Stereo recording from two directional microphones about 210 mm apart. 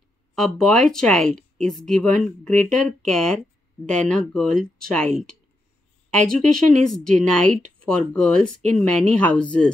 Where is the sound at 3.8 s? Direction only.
5° left (ahead or behind).